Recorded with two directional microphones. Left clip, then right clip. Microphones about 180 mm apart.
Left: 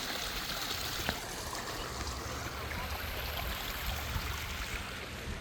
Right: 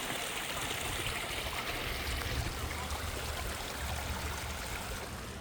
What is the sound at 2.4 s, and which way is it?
Stream, 70° right (ahead or behind).